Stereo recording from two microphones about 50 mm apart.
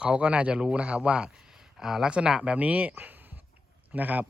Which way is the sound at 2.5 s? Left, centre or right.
Right.